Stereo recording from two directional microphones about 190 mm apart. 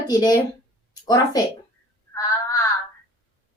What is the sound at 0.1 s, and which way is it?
A child's voice, 20° left (ahead or behind).